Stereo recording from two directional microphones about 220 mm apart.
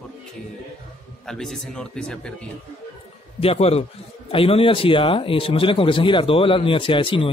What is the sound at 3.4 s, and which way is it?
Speech, 25° left (ahead or behind).